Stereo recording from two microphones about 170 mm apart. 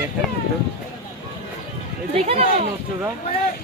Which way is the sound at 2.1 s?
35° right (ahead or behind).